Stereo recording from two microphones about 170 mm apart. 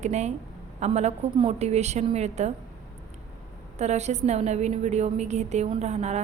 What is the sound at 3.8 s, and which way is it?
A woman's voice, 40° right (ahead or behind).